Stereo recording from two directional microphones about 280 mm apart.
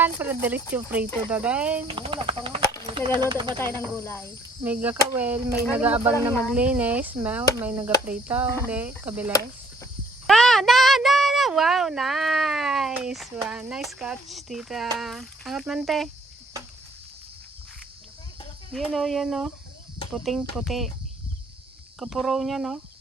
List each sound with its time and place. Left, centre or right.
0.0 s speech: centre
1.9 s speech: centre
3.8 s speech: centre
4.6 s speech: centre
18.7 s speech: centre
21.9 s speech: centre